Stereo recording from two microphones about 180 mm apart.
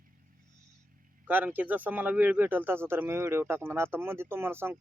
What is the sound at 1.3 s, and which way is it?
Speech, 10° right (ahead or behind).